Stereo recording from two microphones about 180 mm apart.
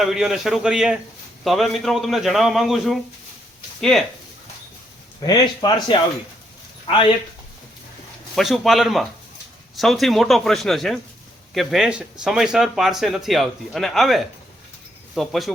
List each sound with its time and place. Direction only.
0.0 s speech: centre (ahead or behind)
5.2 s speech: 25° left (ahead or behind)
8.4 s speech: centre (ahead or behind)